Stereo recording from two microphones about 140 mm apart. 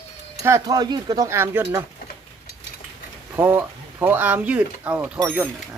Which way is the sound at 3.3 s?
15° right (ahead or behind).